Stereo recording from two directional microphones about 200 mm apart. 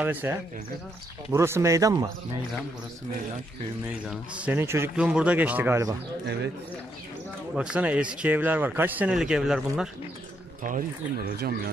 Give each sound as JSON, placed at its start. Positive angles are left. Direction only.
{"t": 0.0, "sound": "speech", "side_deg": -10}
{"t": 4.1, "sound": "speech", "side_deg": -10}
{"t": 7.5, "sound": "speech", "side_deg": -5}
{"t": 10.6, "sound": "speech", "side_deg": -45}